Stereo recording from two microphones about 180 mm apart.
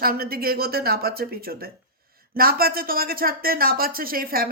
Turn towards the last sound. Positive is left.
turn(degrees=-55)  # may be behind; listen again after turning